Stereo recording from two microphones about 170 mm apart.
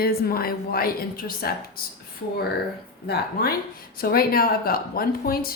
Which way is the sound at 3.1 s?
65° left (ahead or behind).